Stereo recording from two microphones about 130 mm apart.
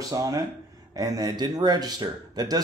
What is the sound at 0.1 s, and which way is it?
Speech, 30° right (ahead or behind).